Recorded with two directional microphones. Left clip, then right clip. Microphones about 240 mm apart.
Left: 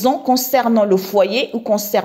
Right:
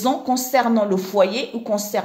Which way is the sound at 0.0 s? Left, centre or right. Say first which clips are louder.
Left 5 dB; left.